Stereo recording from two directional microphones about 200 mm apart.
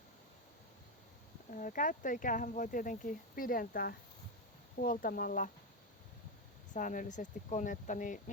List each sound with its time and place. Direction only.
1.5 s speech: 40° left (ahead or behind)
6.7 s speech: 40° left (ahead or behind)